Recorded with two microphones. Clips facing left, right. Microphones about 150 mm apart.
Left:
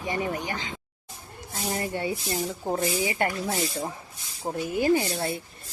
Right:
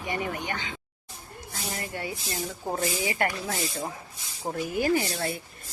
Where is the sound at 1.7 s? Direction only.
25° left (ahead or behind).